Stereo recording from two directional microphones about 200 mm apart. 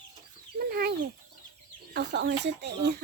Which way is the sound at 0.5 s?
50° right (ahead or behind).